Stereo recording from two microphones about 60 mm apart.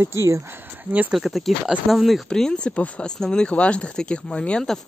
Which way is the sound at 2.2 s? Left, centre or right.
Centre.